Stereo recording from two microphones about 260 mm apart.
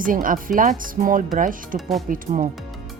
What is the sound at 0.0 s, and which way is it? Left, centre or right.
Speech, right.